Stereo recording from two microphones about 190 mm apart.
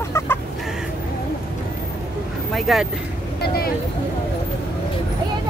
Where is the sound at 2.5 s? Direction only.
Centre (ahead or behind).